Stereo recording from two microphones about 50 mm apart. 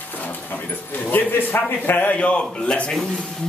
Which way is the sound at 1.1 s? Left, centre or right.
Left.